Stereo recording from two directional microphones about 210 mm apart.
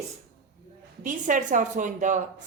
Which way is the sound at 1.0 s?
40° right (ahead or behind).